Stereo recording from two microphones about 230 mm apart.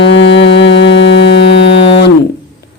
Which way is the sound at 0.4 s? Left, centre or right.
Left.